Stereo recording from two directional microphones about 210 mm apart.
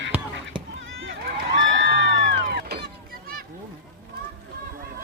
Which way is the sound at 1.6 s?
65° right (ahead or behind).